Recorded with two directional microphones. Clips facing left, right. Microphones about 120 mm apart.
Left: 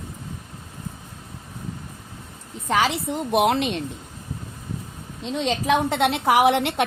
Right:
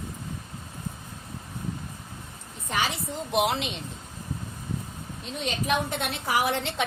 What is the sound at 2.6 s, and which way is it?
Speech, 90° left.